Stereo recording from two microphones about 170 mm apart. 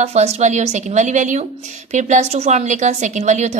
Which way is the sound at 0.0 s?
40° right (ahead or behind).